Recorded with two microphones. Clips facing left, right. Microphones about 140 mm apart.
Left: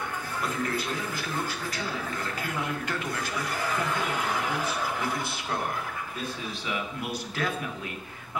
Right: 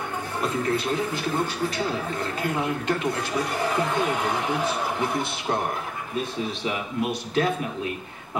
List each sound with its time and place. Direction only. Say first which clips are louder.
0.4 s a man's voice: right 6 dB; 25° right (ahead or behind)
6.6 s a man's voice: right 5 dB; 25° right (ahead or behind)